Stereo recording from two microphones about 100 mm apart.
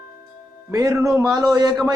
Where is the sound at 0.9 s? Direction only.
30° right (ahead or behind).